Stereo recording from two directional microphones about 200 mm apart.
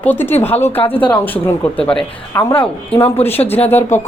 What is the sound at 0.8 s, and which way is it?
Speech, 25° left (ahead or behind).